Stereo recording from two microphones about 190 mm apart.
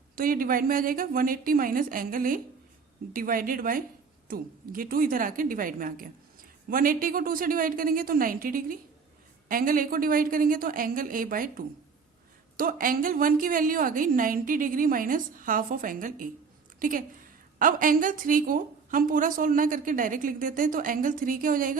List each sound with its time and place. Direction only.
0.2 s a woman's voice: 50° right (ahead or behind)